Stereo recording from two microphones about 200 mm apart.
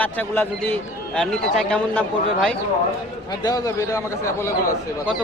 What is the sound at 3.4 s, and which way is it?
A man's voice, 20° left (ahead or behind).